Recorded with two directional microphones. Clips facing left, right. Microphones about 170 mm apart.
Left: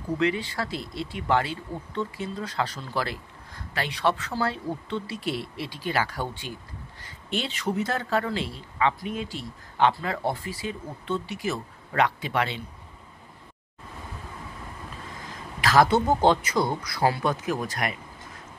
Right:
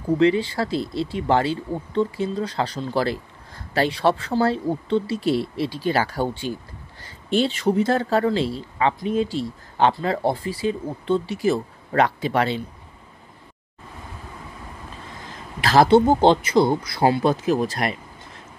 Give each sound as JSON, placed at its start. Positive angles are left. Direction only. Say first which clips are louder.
{"t": 0.2, "sound": "a woman's voice", "louder": "right 7 dB", "side_deg": -30}
{"t": 15.6, "sound": "speech", "louder": "right 6 dB", "side_deg": -30}